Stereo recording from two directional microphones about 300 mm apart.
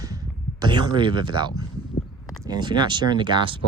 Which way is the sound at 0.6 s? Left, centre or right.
Centre.